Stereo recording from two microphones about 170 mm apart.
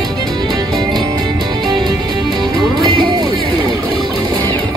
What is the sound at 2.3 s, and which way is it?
Music, 25° right (ahead or behind).